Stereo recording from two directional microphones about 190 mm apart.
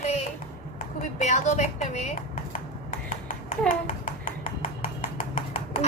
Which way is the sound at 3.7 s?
45° left (ahead or behind).